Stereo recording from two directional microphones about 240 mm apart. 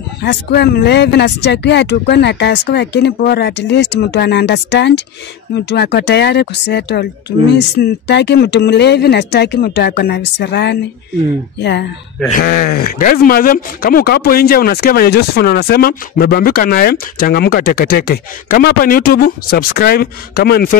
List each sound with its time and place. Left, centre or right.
0.2 s speech: left
12.3 s speech: left